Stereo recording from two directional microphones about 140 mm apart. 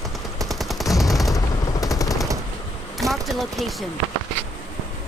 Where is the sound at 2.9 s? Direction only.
Centre (ahead or behind).